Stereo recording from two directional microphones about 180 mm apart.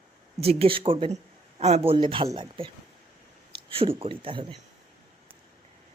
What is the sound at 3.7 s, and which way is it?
Speech, 30° right (ahead or behind).